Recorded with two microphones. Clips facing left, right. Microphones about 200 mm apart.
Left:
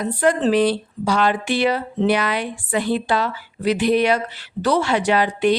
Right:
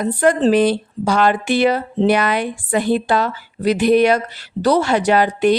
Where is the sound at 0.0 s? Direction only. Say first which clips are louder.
Right 3 dB; 45° right (ahead or behind).